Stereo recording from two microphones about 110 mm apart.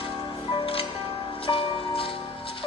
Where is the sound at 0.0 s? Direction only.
55° left (ahead or behind).